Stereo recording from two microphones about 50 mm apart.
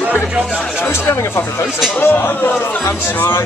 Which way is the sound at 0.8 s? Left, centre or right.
Left.